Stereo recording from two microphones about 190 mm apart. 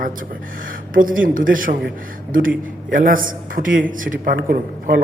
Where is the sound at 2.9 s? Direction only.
45° right (ahead or behind).